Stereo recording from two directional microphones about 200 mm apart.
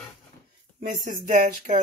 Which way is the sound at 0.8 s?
40° right (ahead or behind).